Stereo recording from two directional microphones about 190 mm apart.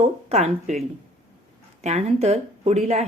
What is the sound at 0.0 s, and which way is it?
Speech, 30° right (ahead or behind).